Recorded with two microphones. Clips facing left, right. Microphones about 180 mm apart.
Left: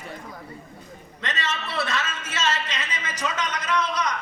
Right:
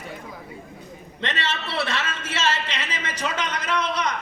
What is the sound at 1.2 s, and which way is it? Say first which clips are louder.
Speech: right 2 dB; 30° right (ahead or behind).